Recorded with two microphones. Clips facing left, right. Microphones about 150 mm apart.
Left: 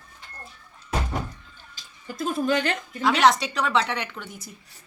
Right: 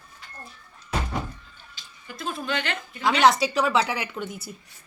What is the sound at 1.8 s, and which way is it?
Speech, 45° left (ahead or behind).